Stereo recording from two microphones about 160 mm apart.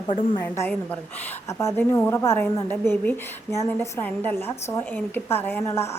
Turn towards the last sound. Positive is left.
turn(degrees=15)  # may be behind; listen again after turning